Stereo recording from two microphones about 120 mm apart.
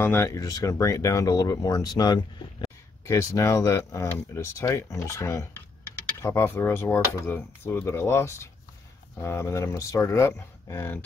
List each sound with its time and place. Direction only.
0.0 s speech: 20° left (ahead or behind)